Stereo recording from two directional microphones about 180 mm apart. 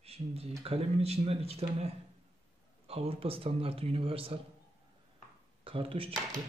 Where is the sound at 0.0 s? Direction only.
35° right (ahead or behind).